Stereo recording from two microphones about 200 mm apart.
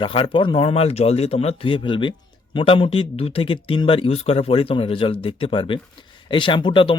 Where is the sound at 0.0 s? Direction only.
25° left (ahead or behind).